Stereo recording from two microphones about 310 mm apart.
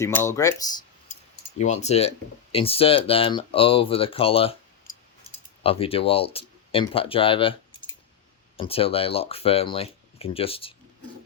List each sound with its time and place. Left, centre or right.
0.0 s speech: centre
1.5 s speech: left
8.5 s speech: centre